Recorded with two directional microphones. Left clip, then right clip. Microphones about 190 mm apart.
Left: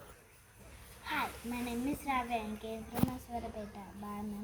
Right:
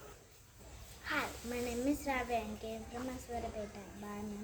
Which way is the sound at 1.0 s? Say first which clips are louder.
Left 1 dB; 20° right (ahead or behind).